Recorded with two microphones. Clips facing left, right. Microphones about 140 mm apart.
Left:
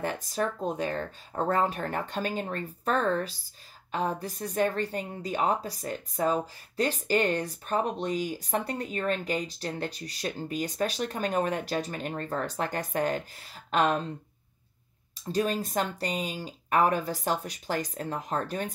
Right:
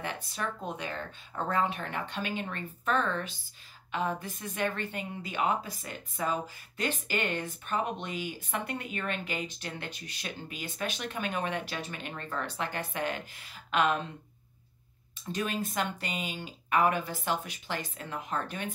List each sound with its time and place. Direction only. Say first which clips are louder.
0.0 s speech: left 6 dB; 40° left (ahead or behind)
15.3 s speech: left 5 dB; 35° left (ahead or behind)